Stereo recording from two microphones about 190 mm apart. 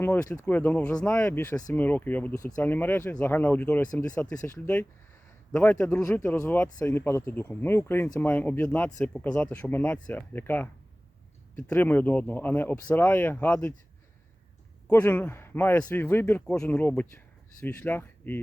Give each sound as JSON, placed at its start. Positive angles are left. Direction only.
{"t": 0.0, "sound": "speech", "side_deg": 15}
{"t": 14.8, "sound": "speech", "side_deg": 10}